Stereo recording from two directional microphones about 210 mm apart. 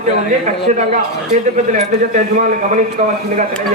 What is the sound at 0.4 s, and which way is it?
A man's voice, 35° right (ahead or behind).